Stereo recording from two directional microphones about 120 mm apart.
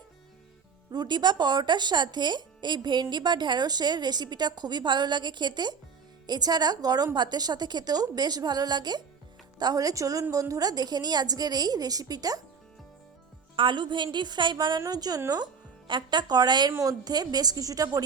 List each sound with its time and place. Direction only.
0.9 s speech: 35° right (ahead or behind)
13.6 s speech: 40° right (ahead or behind)